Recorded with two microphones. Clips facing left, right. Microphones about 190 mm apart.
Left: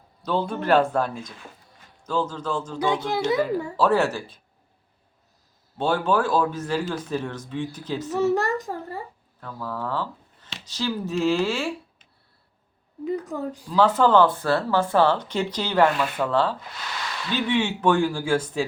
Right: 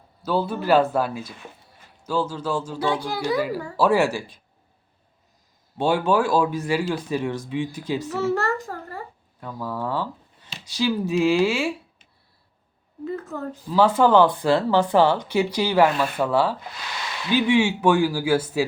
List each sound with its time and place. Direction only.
0.2 s speech: 5° right (ahead or behind)
2.7 s speech: 20° left (ahead or behind)
3.8 s speech: 10° right (ahead or behind)
5.7 s speech: 15° right (ahead or behind)
8.2 s a sound: 15° left (ahead or behind)
9.4 s speech: 15° right (ahead or behind)
13.1 s a sound: 15° left (ahead or behind)
13.7 s speech: 10° right (ahead or behind)